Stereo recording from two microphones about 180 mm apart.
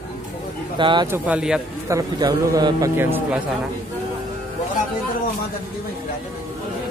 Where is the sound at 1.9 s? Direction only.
20° right (ahead or behind).